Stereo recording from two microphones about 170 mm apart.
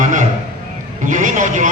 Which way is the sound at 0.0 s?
50° right (ahead or behind).